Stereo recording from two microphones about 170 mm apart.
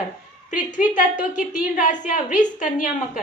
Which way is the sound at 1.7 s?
50° left (ahead or behind).